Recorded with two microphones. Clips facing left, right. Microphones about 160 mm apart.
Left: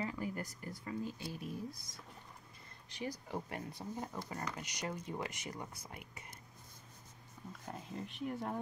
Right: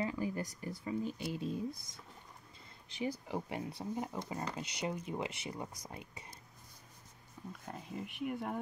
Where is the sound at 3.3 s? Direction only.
15° right (ahead or behind).